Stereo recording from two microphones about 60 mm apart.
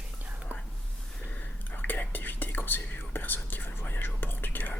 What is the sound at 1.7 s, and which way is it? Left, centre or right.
Speech, left.